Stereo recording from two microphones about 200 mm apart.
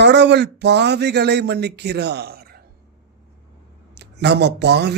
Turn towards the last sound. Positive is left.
turn(degrees=-55)  # may be behind; listen again after turning